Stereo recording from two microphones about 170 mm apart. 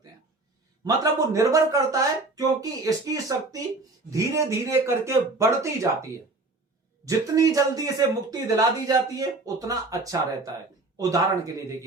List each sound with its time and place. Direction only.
0.9 s speech: 20° right (ahead or behind)